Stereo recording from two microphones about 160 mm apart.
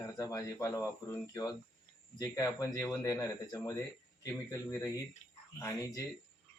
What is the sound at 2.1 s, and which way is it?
Speech, 20° left (ahead or behind).